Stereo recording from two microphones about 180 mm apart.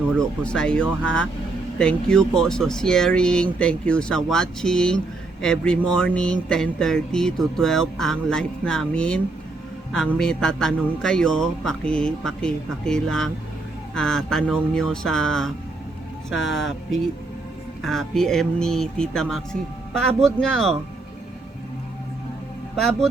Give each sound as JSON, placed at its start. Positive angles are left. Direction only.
{"t": 0.2, "sound": "speech", "side_deg": 5}
{"t": 22.7, "sound": "speech", "side_deg": 0}